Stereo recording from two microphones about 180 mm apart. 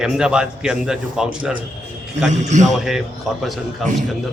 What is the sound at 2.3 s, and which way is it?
Speech, 40° right (ahead or behind).